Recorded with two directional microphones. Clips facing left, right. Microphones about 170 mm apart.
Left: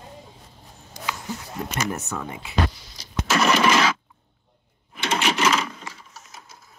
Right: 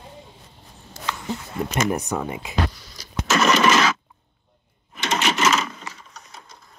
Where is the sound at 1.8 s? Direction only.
15° right (ahead or behind).